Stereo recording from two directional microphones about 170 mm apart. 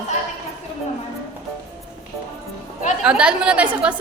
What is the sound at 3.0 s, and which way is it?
Speech, 5° right (ahead or behind).